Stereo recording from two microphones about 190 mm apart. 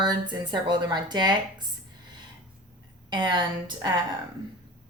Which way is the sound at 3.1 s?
25° right (ahead or behind).